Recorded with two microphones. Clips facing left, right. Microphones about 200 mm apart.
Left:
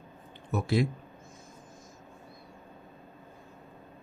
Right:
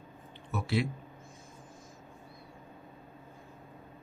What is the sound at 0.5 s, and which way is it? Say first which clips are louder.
Speech: left 4 dB; 40° left (ahead or behind).